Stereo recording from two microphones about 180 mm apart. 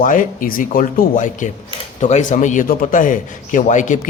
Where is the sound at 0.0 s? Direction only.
45° left (ahead or behind).